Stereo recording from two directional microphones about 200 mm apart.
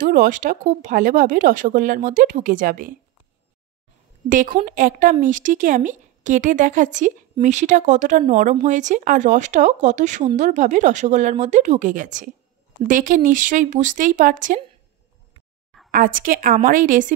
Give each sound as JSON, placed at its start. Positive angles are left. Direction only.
{"t": 0.0, "sound": "speech", "side_deg": -45}
{"t": 4.3, "sound": "speech", "side_deg": -40}
{"t": 15.9, "sound": "speech", "side_deg": -45}